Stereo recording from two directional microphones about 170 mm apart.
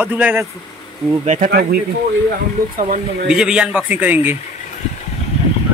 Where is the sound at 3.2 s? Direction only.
5° right (ahead or behind).